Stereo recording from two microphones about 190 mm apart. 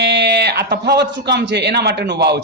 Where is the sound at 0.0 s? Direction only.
65° right (ahead or behind).